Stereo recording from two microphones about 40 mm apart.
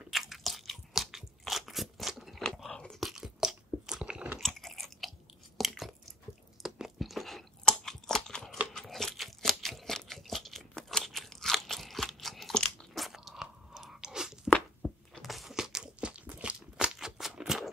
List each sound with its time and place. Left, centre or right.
0.1 s crunch: centre
2.4 s biting: centre
3.0 s crunch: centre
4.4 s chewing: centre
5.6 s a sound: centre
6.6 s chewing: centre
7.6 s crunch: centre
12.9 s chewing: centre
14.8 s a sound: centre
15.2 s crunch: centre
15.5 s a sound: centre
16.0 s crunch: right
16.8 s shuffling cards: centre
17.5 s horse: centre